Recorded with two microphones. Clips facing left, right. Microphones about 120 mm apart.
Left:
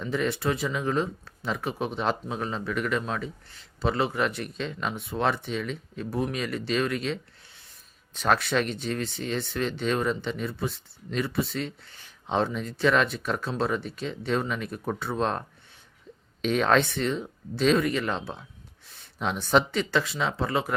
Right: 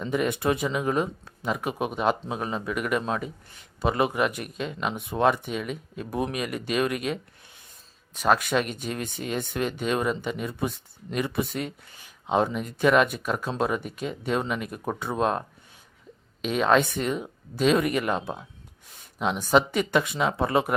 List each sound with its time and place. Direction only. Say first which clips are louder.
0.1 s speech: right 2 dB; 15° right (ahead or behind)